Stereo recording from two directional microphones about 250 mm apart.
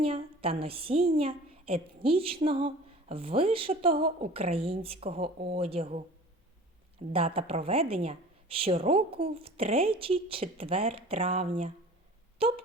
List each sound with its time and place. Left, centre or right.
0.0 s a woman's voice: right
7.1 s a woman's voice: right